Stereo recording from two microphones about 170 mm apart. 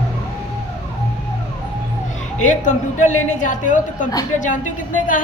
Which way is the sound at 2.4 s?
45° left (ahead or behind).